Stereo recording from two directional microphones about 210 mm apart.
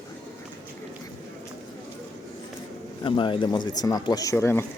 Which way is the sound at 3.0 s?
25° left (ahead or behind).